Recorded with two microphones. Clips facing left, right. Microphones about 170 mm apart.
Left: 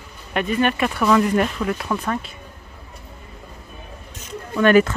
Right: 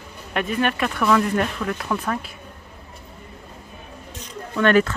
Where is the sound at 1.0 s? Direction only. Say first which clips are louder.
Left 2 dB; 10° left (ahead or behind).